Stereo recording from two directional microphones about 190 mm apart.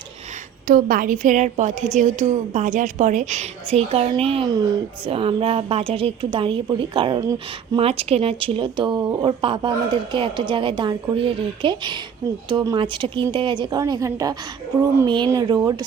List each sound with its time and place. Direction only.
0.7 s a woman's voice: 50° right (ahead or behind); by 7.8 s 20° right (ahead or behind)
7.8 s speech: 30° right (ahead or behind)